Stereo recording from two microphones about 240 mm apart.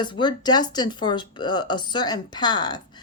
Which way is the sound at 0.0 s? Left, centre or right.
Centre.